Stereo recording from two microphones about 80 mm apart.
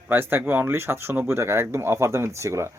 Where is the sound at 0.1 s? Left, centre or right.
Right.